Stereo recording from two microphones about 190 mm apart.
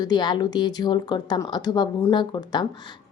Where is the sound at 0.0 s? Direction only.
20° left (ahead or behind).